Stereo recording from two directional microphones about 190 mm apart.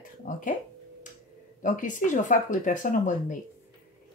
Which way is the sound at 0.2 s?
45° left (ahead or behind).